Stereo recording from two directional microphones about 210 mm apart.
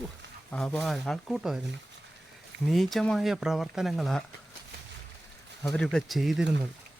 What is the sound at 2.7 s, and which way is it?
Speech, centre (ahead or behind).